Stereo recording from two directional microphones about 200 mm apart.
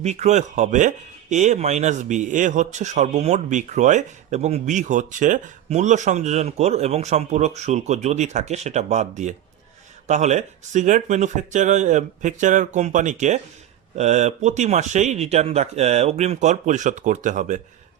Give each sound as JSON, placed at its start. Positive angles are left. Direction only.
{"t": 0.0, "sound": "speech", "side_deg": -35}